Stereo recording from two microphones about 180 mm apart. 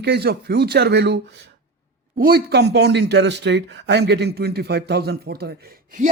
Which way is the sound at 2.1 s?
60° right (ahead or behind).